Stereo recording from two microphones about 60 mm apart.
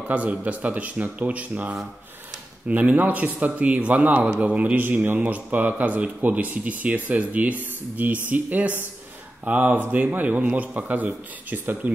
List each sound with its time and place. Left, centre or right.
0.1 s speech: right